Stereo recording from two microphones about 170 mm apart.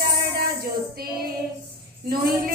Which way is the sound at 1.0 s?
65° right (ahead or behind).